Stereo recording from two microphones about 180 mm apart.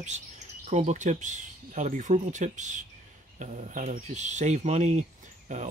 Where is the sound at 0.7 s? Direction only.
40° right (ahead or behind).